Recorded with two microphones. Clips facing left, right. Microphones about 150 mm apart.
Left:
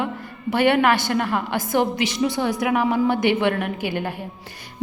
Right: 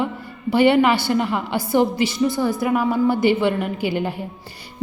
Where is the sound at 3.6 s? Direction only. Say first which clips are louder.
Right 3 dB; 55° left (ahead or behind).